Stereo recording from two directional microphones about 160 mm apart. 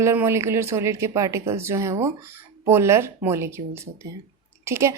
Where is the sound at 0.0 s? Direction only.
15° right (ahead or behind).